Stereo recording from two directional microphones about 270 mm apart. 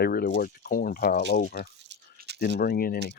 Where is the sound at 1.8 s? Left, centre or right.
Right.